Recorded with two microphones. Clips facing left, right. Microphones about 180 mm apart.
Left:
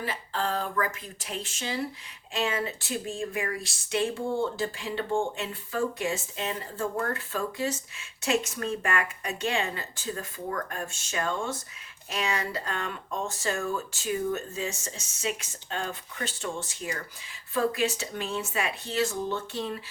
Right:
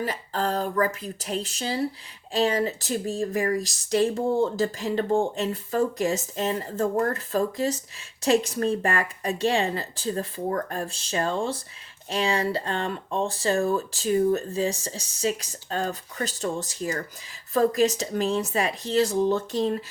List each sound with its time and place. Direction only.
0.0 s speech: 40° right (ahead or behind)